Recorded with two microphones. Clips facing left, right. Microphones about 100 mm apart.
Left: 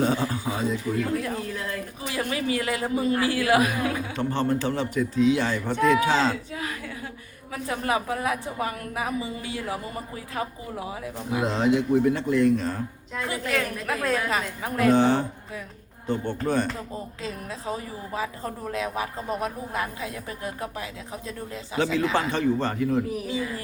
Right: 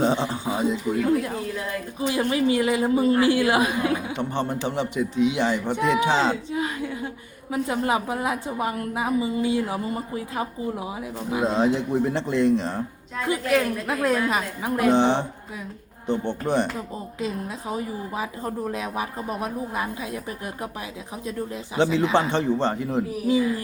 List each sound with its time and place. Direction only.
0.0 s a man's voice: 25° right (ahead or behind)